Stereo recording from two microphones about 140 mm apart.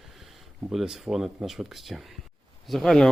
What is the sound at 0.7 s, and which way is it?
Speech, centre (ahead or behind).